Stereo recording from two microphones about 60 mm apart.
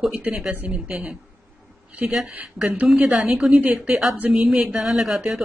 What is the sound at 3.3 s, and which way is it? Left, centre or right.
Speech, centre.